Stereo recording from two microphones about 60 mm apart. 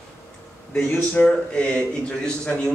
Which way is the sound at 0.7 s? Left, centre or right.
Left.